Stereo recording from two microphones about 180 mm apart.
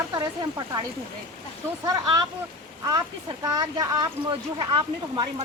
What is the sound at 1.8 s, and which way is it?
Speech, 20° right (ahead or behind).